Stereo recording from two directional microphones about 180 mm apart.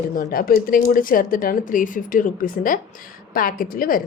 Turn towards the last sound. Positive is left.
turn(degrees=50)  # may be behind; listen again after turning